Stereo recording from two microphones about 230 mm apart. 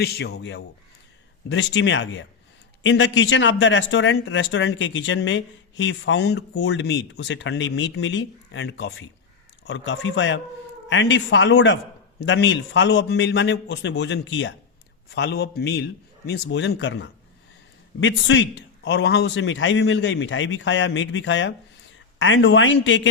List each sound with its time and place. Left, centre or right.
0.0 s a man's voice: left